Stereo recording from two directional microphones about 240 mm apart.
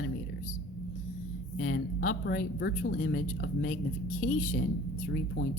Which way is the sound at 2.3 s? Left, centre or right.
Left.